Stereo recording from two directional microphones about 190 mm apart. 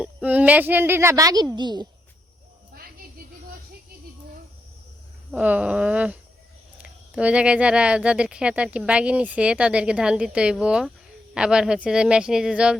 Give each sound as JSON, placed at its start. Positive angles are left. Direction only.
{"t": 0.0, "sound": "a woman's voice", "side_deg": -5}
{"t": 5.3, "sound": "a woman's voice", "side_deg": -5}